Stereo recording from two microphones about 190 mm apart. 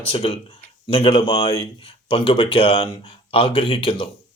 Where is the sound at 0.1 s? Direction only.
30° left (ahead or behind).